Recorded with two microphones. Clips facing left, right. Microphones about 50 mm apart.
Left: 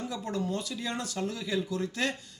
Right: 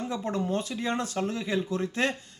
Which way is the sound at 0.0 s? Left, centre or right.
Right.